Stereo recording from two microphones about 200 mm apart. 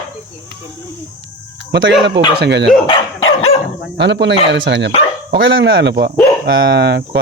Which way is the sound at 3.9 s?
60° right (ahead or behind).